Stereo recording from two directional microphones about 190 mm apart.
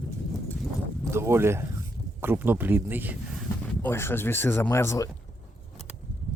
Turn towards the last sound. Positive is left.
turn(degrees=15)  # may be behind; listen again after turning